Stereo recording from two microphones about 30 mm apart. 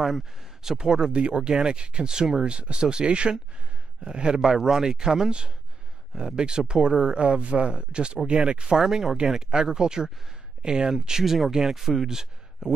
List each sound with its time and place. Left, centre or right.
0.7 s speech: right
11.0 s speech: centre
12.6 s speech: right